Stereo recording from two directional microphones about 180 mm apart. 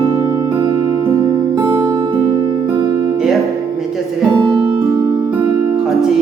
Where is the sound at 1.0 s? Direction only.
15° right (ahead or behind).